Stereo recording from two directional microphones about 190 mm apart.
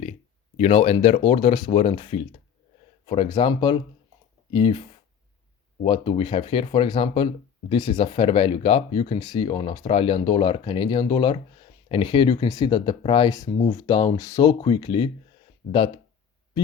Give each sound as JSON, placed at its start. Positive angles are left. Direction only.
{"t": 0.5, "sound": "speech", "side_deg": 35}
{"t": 5.8, "sound": "speech", "side_deg": 25}